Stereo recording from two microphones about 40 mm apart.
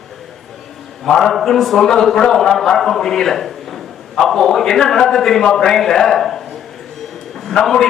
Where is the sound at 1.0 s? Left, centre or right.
Centre.